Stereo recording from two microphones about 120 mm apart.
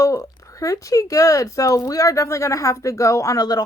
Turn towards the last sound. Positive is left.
turn(degrees=30)  # may be behind; listen again after turning